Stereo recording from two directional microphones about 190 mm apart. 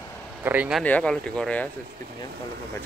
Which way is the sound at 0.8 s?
5° left (ahead or behind).